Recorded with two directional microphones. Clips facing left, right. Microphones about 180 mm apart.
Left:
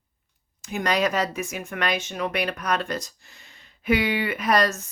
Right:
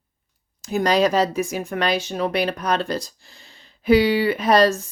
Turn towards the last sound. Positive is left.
turn(degrees=-30)  # may be behind; listen again after turning